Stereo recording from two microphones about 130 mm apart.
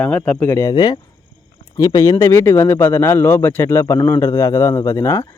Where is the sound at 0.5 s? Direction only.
25° left (ahead or behind).